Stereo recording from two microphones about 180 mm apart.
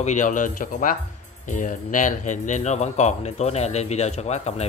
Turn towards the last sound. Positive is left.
turn(degrees=35)  # may be behind; listen again after turning